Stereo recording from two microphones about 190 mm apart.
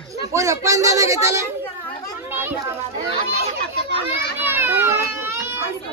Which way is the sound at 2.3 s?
10° right (ahead or behind).